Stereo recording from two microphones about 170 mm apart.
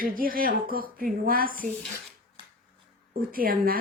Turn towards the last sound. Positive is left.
turn(degrees=-60)  # may be behind; listen again after turning